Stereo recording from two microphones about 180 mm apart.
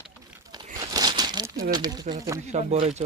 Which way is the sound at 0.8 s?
20° right (ahead or behind).